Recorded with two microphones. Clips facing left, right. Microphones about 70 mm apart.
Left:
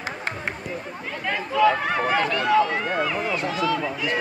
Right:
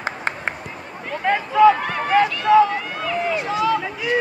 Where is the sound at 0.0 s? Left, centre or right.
Right.